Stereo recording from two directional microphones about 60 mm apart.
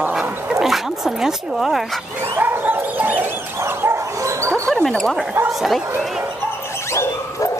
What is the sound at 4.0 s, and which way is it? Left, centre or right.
Dog, right.